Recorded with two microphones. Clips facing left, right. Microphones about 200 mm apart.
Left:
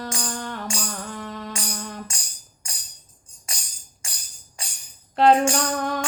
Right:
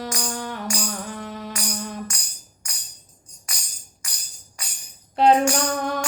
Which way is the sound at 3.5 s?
25° left (ahead or behind).